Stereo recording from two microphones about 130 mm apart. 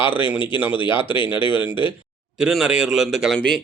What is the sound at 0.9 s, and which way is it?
Speech, 40° left (ahead or behind).